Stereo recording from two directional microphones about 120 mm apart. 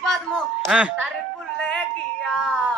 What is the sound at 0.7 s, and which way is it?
Speech, 10° right (ahead or behind).